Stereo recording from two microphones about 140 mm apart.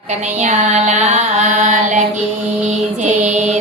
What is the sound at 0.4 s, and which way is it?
Music, 55° right (ahead or behind).